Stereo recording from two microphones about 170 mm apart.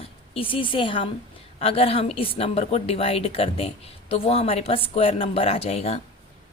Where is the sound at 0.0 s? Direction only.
30° left (ahead or behind).